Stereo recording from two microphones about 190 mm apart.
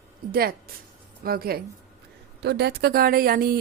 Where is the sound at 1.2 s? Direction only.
50° right (ahead or behind).